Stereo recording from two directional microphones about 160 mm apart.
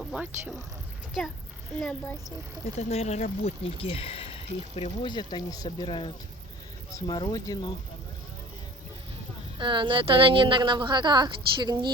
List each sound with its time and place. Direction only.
0.0 s speech: 5° right (ahead or behind)
1.7 s speech: 5° left (ahead or behind)
2.7 s speech: 40° left (ahead or behind); by 7.8 s 25° left (ahead or behind)
9.6 s speech: 30° right (ahead or behind)